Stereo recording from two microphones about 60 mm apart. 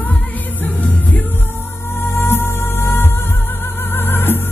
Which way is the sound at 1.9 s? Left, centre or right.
Left.